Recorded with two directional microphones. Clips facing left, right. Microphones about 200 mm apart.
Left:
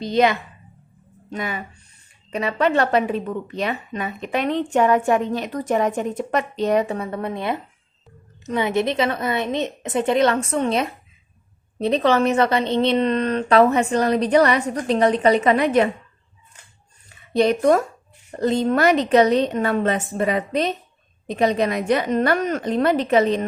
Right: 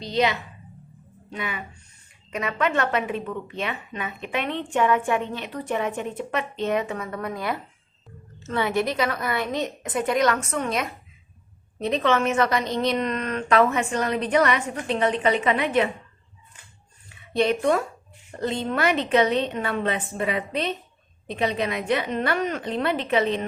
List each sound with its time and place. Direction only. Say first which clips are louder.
0.0 s a woman's voice: left 5 dB; 50° left (ahead or behind)
17.1 s a woman's voice: left 4 dB; 40° left (ahead or behind)